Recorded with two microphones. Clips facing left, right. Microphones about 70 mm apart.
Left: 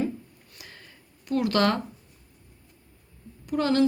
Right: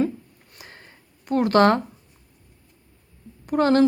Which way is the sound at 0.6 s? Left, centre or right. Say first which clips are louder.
Right 3 dB; right.